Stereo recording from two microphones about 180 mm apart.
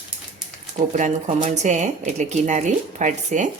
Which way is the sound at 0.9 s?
45° right (ahead or behind).